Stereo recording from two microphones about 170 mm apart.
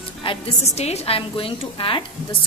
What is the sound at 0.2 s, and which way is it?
A woman's voice, 35° left (ahead or behind).